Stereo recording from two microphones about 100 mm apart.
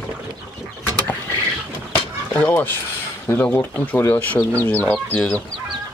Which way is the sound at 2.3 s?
15° left (ahead or behind).